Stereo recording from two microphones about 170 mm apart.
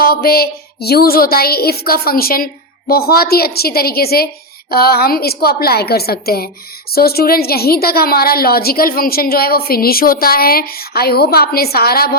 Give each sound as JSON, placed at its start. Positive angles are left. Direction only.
{"t": 0.0, "sound": "a woman's voice", "side_deg": 60}